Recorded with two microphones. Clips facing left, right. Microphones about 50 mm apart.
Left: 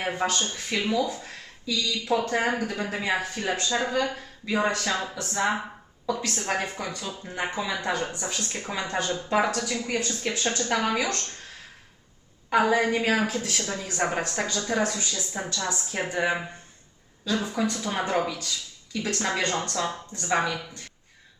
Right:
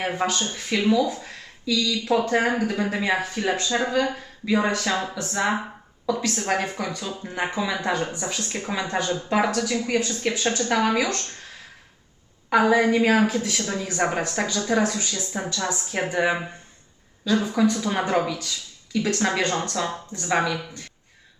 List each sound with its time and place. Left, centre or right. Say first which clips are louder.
0.0 s speech: right 2 dB; centre
2.0 s speech: right 3 dB; centre
12.5 s speech: right 3 dB; centre
15.7 s speech: right 4 dB; centre